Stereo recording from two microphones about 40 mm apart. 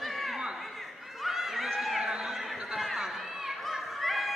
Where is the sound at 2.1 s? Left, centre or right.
Centre.